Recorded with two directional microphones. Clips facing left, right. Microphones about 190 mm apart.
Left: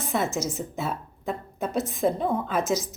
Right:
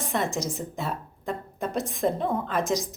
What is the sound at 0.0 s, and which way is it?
Speech, centre (ahead or behind).